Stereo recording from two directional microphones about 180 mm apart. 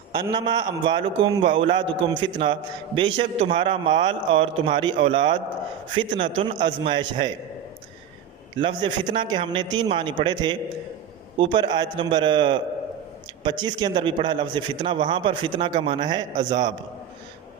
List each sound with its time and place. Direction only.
0.1 s a man's voice: 25° right (ahead or behind)
8.5 s a man's voice: 25° right (ahead or behind)